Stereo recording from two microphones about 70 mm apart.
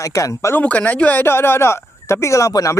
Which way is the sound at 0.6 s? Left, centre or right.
Left.